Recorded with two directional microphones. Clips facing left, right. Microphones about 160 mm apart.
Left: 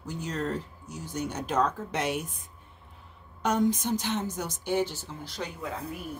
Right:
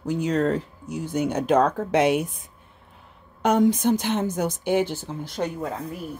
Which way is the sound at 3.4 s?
65° right (ahead or behind).